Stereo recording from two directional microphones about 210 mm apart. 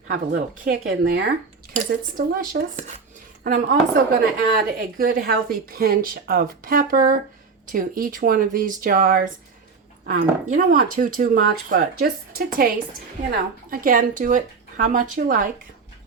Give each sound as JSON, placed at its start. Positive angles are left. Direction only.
{"t": 0.1, "sound": "speech", "side_deg": -45}
{"t": 10.5, "sound": "speech", "side_deg": -40}